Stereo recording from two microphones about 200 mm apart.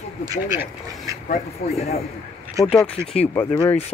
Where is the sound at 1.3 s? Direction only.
30° left (ahead or behind).